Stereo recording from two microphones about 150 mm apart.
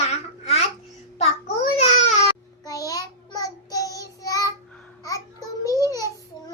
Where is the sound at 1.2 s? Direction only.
45° left (ahead or behind).